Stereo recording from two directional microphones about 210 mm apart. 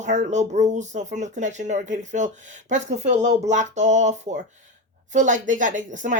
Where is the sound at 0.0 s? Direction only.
35° right (ahead or behind).